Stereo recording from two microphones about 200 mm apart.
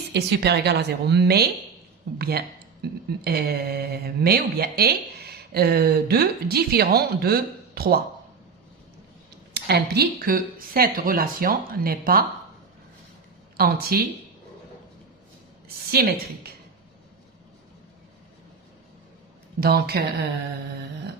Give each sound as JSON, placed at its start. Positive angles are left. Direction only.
{"t": 0.1, "sound": "a woman's voice", "side_deg": -55}
{"t": 9.6, "sound": "speech", "side_deg": -55}
{"t": 13.6, "sound": "speech", "side_deg": -50}
{"t": 15.9, "sound": "speech", "side_deg": -50}
{"t": 19.5, "sound": "speech", "side_deg": -50}